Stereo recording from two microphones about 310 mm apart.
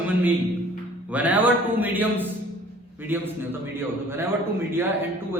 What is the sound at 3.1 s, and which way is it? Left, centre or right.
A man's voice, centre.